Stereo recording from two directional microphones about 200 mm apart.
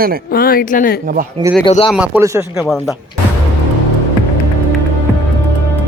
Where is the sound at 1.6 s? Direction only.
25° left (ahead or behind).